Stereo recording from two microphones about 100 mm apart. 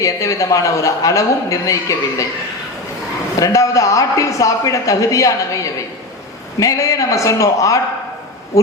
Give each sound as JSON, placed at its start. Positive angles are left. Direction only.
{"t": 0.0, "sound": "speech", "side_deg": 35}
{"t": 3.3, "sound": "speech", "side_deg": 35}